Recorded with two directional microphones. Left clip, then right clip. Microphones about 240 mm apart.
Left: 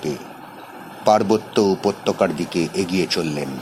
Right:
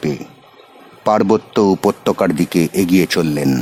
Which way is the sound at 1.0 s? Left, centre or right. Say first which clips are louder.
Right 2 dB; right.